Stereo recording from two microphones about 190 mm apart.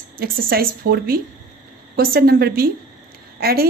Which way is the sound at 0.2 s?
50° right (ahead or behind).